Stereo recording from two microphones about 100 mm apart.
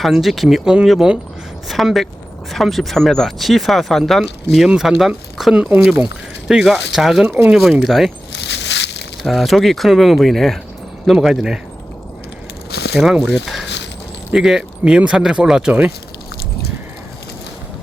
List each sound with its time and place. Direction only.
0.0 s speech: centre (ahead or behind)
9.2 s speech: centre (ahead or behind)
13.0 s speech: 5° right (ahead or behind)